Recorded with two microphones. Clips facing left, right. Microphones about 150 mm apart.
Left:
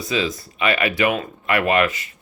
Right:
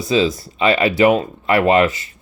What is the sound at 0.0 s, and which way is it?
Speech, 30° right (ahead or behind).